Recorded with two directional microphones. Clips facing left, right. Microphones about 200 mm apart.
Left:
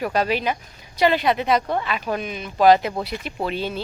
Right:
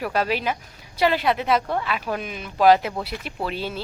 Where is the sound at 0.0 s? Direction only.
5° right (ahead or behind).